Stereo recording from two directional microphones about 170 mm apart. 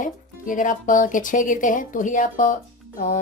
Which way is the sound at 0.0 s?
50° left (ahead or behind).